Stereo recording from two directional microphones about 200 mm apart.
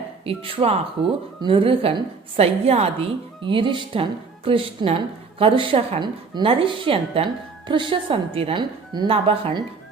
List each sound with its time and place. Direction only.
0.3 s a woman's voice: 30° right (ahead or behind)